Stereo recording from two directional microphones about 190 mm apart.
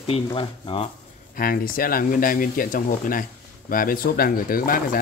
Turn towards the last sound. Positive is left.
turn(degrees=50)  # may be behind; listen again after turning